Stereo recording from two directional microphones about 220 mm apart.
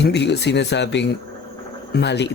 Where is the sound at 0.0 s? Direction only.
50° left (ahead or behind).